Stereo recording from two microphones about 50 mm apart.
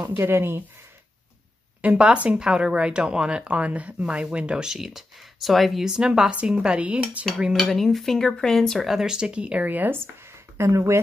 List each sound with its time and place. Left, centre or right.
0.1 s speech: right
1.8 s speech: right; by 5.9 s centre
5.9 s speech: centre
7.5 s speech: centre
8.7 s speech: centre; by 9.7 s right
9.7 s speech: right
9.9 s speech: right